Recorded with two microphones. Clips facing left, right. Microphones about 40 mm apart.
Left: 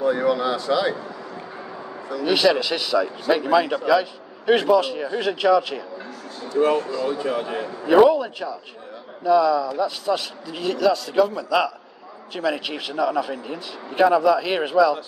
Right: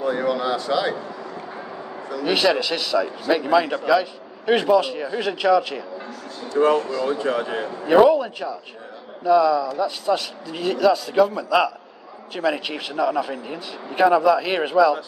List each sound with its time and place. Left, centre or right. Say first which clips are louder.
0.0 s a sound: left 2 dB; centre
2.2 s a man's voice: left 1 dB; centre
6.5 s speech: right 1 dB; right
6.9 s speech: right 1 dB; right
7.8 s a man's voice: even; centre